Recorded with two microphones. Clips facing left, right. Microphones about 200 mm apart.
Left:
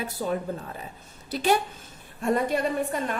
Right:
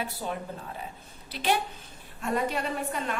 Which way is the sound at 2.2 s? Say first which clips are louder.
Left 5 dB; 50° left (ahead or behind).